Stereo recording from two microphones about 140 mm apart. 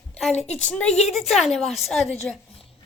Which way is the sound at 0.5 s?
10° left (ahead or behind).